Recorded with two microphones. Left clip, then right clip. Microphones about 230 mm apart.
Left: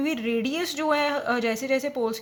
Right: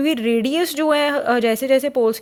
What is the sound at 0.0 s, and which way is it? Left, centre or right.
A woman's voice, right.